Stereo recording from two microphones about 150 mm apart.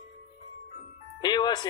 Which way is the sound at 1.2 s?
30° left (ahead or behind).